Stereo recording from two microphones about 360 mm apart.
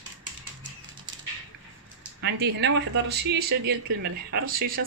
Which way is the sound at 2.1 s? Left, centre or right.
Right.